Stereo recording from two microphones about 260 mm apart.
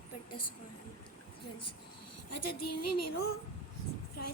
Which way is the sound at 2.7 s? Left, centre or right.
Left.